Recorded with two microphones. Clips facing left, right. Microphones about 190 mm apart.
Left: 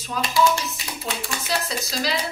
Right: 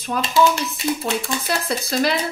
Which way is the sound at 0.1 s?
55° right (ahead or behind).